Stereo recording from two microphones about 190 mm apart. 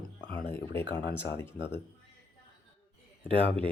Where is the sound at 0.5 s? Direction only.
10° left (ahead or behind).